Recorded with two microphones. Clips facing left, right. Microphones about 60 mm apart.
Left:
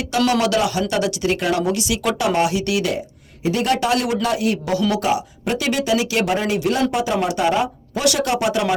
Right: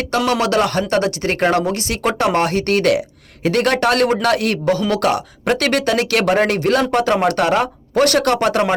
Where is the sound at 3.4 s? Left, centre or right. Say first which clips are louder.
Right 3 dB; right.